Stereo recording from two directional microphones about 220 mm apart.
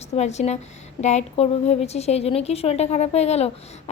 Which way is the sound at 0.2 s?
30° left (ahead or behind).